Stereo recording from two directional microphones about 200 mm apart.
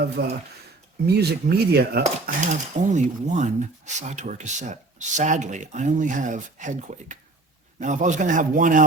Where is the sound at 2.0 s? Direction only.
35° right (ahead or behind).